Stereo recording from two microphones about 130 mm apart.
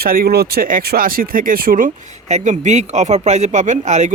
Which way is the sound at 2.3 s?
65° right (ahead or behind).